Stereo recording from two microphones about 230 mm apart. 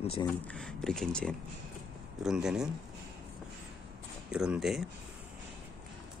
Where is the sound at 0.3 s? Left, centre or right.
Centre.